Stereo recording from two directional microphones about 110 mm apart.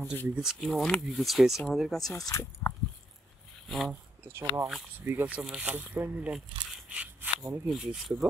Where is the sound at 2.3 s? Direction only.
25° left (ahead or behind).